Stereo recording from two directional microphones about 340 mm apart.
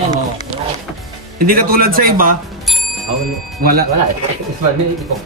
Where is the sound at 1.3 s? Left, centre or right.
Right.